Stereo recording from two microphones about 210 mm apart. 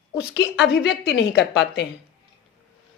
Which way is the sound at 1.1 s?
55° left (ahead or behind).